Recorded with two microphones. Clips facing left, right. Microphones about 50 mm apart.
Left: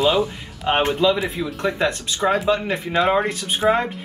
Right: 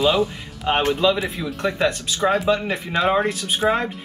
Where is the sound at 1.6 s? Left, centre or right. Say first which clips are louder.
Right 1 dB; centre.